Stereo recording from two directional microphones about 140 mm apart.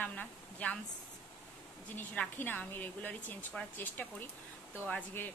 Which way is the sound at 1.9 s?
10° left (ahead or behind).